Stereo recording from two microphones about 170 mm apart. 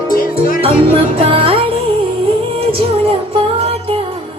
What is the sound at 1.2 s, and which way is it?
Music, 35° right (ahead or behind).